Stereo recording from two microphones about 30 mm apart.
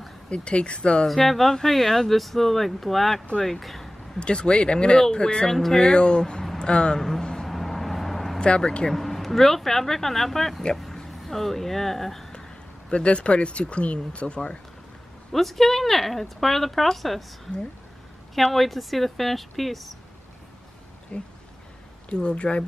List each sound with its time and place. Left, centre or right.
0.3 s speech: left
1.0 s speech: centre
4.2 s speech: left
5.1 s speech: left
5.8 s speech: left
7.0 s a sound: centre
7.4 s vehicle: centre
8.4 s speech: left
9.0 s speech: centre
12.9 s speech: left
15.3 s speech: centre
18.3 s speech: centre
21.1 s speech: left